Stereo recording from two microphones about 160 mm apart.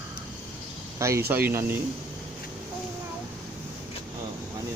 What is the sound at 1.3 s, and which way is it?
Speech, 15° right (ahead or behind).